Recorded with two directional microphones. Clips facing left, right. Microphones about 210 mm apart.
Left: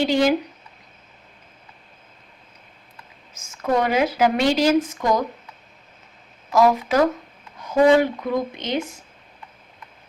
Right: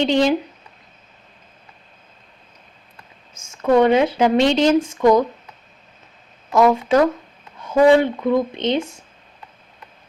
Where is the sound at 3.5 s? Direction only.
30° right (ahead or behind).